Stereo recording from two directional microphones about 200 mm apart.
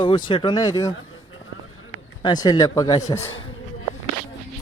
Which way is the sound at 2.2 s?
20° left (ahead or behind).